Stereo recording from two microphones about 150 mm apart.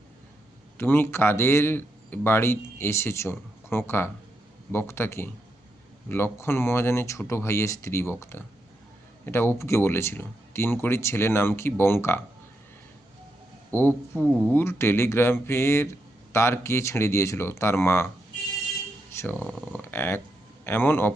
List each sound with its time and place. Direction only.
0.8 s speech: 15° left (ahead or behind)
13.7 s speech: 15° left (ahead or behind)
19.1 s speech: 15° left (ahead or behind)
19.5 s speech: centre (ahead or behind)
19.7 s speech: 15° left (ahead or behind)